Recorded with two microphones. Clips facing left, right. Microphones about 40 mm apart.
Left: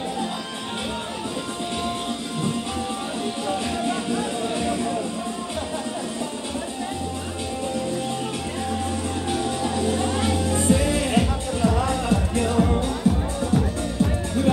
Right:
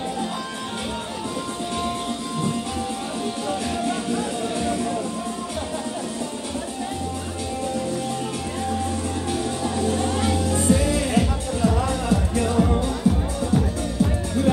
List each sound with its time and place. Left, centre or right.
9.9 s music: left
12.5 s music: centre